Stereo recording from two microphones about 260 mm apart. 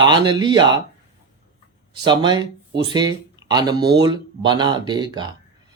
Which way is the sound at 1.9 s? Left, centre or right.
Centre.